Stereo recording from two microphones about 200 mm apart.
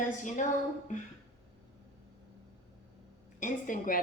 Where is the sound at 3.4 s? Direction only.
45° left (ahead or behind).